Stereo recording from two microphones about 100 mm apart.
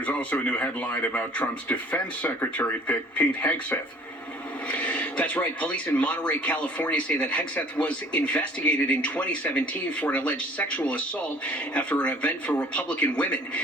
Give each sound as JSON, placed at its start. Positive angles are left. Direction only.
{"t": 0.0, "sound": "speech", "side_deg": 15}